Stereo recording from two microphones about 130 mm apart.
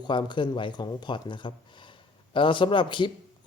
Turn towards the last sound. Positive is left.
turn(degrees=40)  # may be behind; listen again after turning